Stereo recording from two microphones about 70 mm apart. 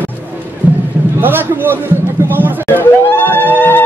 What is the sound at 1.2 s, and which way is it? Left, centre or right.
Speech, right.